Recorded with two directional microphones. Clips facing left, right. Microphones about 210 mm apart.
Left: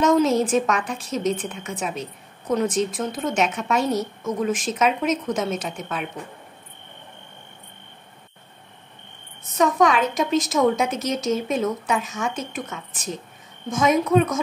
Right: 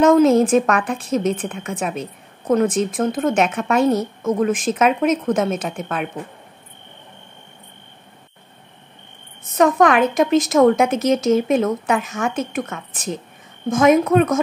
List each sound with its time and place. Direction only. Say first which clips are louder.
0.0 s a woman's voice: right 6 dB; 55° right (ahead or behind)
9.6 s a woman's voice: right 4 dB; 55° right (ahead or behind)